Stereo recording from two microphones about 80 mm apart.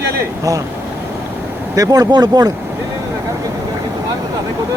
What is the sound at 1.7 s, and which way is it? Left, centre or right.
Speech, right.